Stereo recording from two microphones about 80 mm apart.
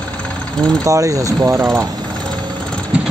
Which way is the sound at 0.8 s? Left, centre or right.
Right.